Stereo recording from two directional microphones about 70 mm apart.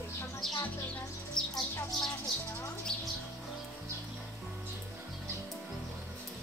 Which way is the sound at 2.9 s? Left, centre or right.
Right.